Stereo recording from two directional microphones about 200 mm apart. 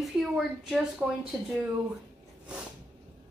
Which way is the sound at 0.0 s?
Centre (ahead or behind).